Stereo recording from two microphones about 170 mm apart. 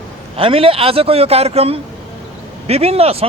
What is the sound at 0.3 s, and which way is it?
Speech, 30° right (ahead or behind).